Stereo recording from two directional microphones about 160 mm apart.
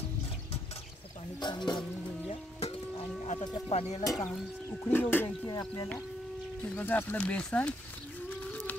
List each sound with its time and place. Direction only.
1.4 s speech: 30° left (ahead or behind)
2.2 s music: 40° left (ahead or behind)
4.0 s speech: 20° left (ahead or behind)
5.5 s speech: 25° left (ahead or behind)
6.6 s speech: 10° left (ahead or behind)